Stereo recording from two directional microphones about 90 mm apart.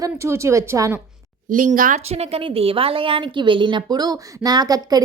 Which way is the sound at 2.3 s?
90° right.